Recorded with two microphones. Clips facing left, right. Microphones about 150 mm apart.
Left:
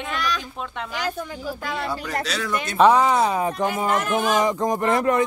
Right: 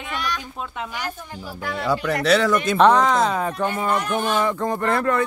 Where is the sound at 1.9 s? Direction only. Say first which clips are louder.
Right 8 dB; 65° right (ahead or behind).